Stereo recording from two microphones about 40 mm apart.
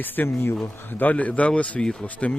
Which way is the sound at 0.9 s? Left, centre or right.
Left.